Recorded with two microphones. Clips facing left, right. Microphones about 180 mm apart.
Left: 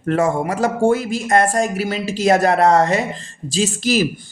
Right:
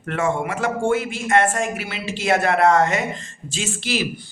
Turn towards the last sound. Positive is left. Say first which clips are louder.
# left 7 dB
turn(degrees=45)  # may be behind; listen again after turning